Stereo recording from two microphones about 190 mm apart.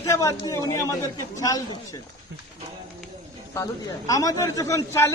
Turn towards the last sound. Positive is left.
turn(degrees=15)  # may be behind; listen again after turning